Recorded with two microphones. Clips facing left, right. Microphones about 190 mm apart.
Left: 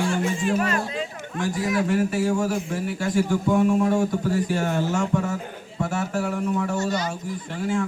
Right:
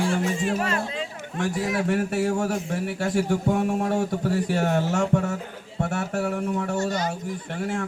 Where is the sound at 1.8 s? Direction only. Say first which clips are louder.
Left 1 dB; 60° right (ahead or behind).